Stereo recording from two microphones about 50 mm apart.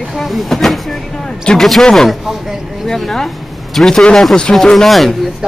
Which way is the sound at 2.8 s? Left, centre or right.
Centre.